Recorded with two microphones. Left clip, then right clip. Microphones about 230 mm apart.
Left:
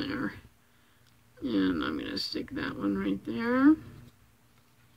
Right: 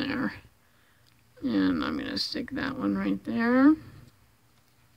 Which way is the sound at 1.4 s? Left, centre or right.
Right.